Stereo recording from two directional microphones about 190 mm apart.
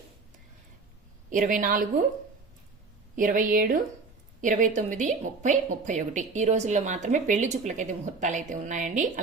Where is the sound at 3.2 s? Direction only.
45° right (ahead or behind).